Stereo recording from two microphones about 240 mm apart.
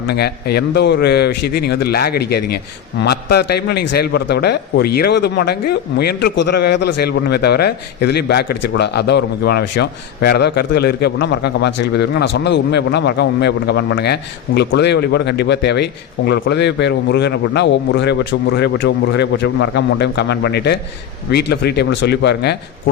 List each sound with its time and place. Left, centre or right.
0.1 s a man's voice: left